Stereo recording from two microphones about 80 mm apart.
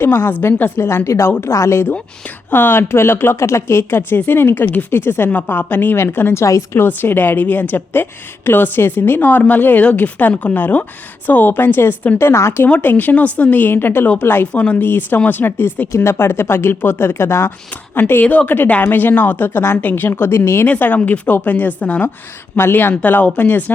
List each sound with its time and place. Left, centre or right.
0.0 s speech: left
12.6 s speech: left
20.7 s speech: left